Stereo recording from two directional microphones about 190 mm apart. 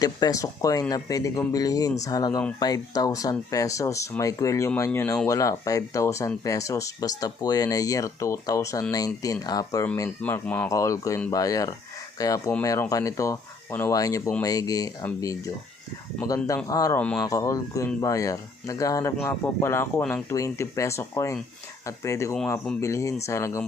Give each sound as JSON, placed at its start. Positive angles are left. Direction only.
{"t": 0.0, "sound": "speech", "side_deg": 20}
{"t": 9.8, "sound": "speech", "side_deg": 10}